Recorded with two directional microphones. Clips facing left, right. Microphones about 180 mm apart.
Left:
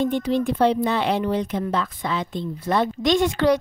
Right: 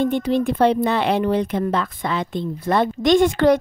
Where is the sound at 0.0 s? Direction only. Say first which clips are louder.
Right 2 dB; 55° right (ahead or behind).